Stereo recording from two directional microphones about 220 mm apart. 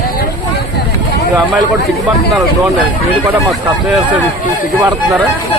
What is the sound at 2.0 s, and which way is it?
Speech, 15° right (ahead or behind).